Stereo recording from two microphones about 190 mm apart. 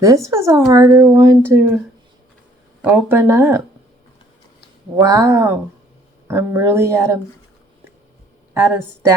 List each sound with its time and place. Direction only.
0.0 s speech: 15° right (ahead or behind)
2.8 s speech: 10° right (ahead or behind)
4.9 s speech: 15° right (ahead or behind)
8.5 s speech: 10° right (ahead or behind)